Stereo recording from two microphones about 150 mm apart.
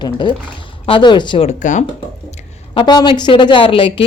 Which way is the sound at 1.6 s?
55° left (ahead or behind).